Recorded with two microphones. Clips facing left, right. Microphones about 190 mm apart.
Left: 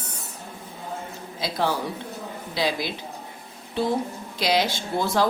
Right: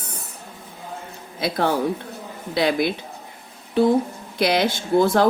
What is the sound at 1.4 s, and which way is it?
A woman's voice, 55° right (ahead or behind).